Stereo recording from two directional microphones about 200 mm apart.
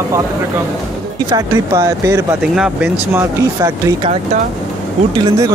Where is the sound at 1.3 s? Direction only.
15° right (ahead or behind).